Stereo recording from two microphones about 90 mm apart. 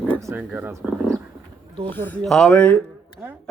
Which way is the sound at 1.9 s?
20° left (ahead or behind).